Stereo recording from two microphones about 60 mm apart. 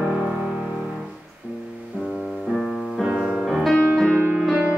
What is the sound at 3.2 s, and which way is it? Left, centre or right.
Music, centre.